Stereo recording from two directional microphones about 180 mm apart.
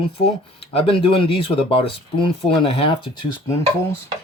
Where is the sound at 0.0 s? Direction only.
30° left (ahead or behind).